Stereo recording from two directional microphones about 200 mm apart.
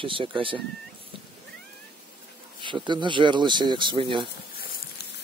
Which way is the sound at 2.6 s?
25° right (ahead or behind).